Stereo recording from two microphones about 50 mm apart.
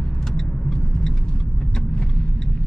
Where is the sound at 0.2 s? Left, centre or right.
Centre.